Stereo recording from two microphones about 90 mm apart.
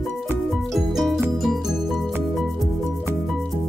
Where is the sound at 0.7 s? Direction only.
5° right (ahead or behind).